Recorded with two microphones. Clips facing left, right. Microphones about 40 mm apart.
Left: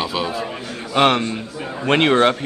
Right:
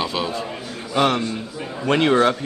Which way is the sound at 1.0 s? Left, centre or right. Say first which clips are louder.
Left 3 dB; left.